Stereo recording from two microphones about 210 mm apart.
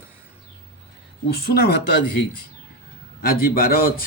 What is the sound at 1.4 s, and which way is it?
Speech, 50° left (ahead or behind).